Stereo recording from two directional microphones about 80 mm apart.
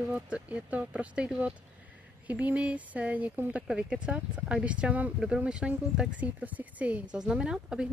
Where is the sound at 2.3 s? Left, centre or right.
Centre.